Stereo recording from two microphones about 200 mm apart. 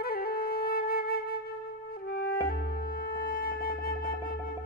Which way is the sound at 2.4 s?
45° left (ahead or behind).